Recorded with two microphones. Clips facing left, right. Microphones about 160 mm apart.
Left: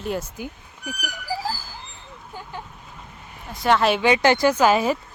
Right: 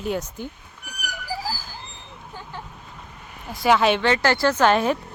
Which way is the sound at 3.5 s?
Centre (ahead or behind).